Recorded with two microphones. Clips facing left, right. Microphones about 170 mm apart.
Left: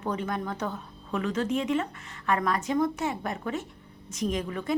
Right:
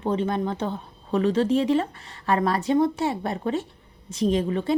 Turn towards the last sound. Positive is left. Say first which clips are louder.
# right 6 dB
turn(degrees=-30)  # may be behind; listen again after turning